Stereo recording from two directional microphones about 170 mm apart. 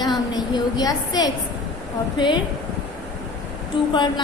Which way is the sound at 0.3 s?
25° left (ahead or behind).